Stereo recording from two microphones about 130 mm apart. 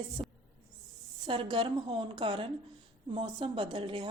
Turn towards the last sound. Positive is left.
turn(degrees=-40)  # may be behind; listen again after turning